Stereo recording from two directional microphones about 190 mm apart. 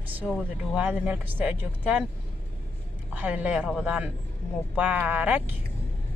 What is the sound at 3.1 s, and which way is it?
Speech, 5° right (ahead or behind).